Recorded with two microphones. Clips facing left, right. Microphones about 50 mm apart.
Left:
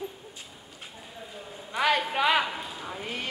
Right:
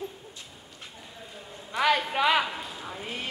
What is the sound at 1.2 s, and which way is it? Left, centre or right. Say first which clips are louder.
Clip-clop: left 3 dB; centre.